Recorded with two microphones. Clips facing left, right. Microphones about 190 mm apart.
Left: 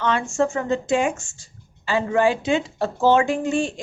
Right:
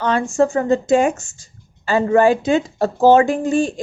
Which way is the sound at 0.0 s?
35° right (ahead or behind).